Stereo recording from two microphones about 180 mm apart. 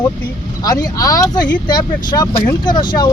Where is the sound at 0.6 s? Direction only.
20° left (ahead or behind).